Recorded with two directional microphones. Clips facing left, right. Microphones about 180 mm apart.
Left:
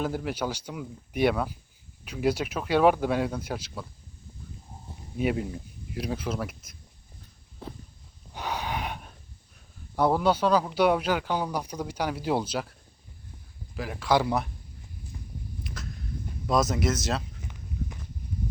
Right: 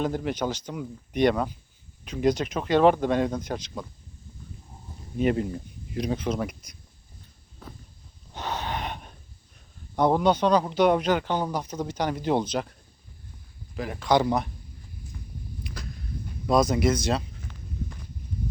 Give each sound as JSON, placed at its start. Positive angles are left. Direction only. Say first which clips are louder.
{"t": 0.0, "sound": "speech", "louder": "right 2 dB", "side_deg": 5}
{"t": 5.1, "sound": "speech", "louder": "right 3 dB", "side_deg": 5}
{"t": 8.3, "sound": "gasp", "louder": "right 1 dB", "side_deg": 10}
{"t": 10.0, "sound": "speech", "louder": "right 2 dB", "side_deg": 5}
{"t": 13.7, "sound": "speech", "louder": "right 2 dB", "side_deg": 5}
{"t": 15.1, "sound": "walk", "louder": "left 1 dB", "side_deg": 25}
{"t": 15.6, "sound": "a sound", "louder": "right 2 dB", "side_deg": 0}
{"t": 16.5, "sound": "speech", "louder": "right 4 dB", "side_deg": 0}
{"t": 17.4, "sound": "a sound", "louder": "even", "side_deg": 15}